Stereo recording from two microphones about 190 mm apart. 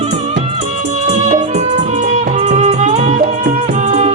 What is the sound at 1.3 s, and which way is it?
Music, 40° right (ahead or behind).